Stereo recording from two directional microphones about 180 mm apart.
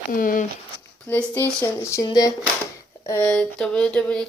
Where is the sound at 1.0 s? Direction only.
10° left (ahead or behind).